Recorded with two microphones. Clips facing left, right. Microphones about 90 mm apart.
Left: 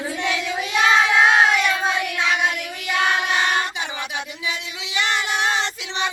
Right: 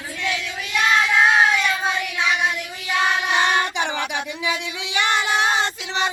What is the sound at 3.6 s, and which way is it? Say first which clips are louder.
Child singing: right 4 dB; 60° right (ahead or behind).